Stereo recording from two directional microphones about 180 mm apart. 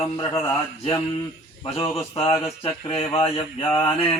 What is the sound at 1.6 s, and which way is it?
Speech, 30° left (ahead or behind).